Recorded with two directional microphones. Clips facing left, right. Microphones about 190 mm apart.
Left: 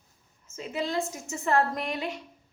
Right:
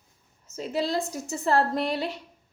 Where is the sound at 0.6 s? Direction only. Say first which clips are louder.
Right 3 dB; 35° right (ahead or behind).